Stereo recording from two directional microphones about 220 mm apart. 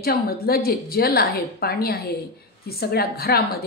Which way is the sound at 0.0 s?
45° left (ahead or behind).